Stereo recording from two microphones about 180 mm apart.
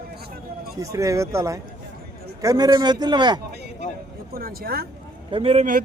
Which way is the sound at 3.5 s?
65° right (ahead or behind).